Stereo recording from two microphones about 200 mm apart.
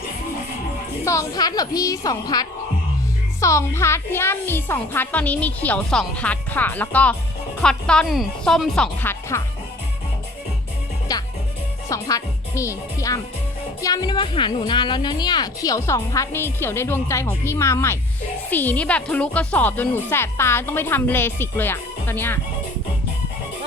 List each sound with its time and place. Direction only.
1.0 s a woman's voice: 15° left (ahead or behind)
11.1 s a woman's voice: 20° left (ahead or behind)